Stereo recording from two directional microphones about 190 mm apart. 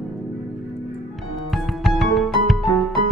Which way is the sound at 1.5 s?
Centre (ahead or behind).